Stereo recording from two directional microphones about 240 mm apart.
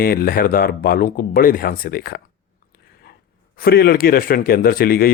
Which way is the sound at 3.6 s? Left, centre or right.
Left.